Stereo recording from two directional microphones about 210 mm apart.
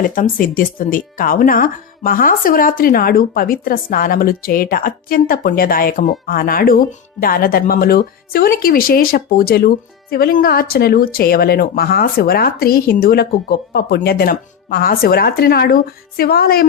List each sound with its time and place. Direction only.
0.1 s speech: 40° left (ahead or behind)